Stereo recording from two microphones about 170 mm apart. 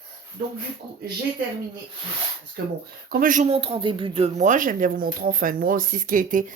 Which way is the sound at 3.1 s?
55° right (ahead or behind).